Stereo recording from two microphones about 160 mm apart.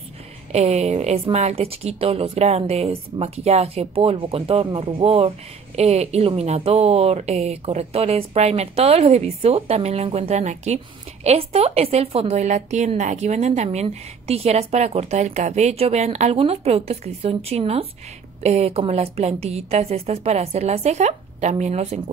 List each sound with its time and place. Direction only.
0.5 s a woman's voice: 45° right (ahead or behind)